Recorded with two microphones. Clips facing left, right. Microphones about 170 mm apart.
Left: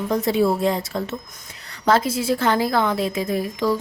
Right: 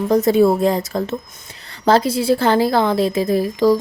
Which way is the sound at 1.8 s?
30° right (ahead or behind).